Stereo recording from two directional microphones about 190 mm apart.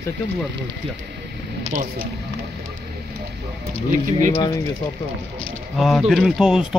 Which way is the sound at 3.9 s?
45° right (ahead or behind).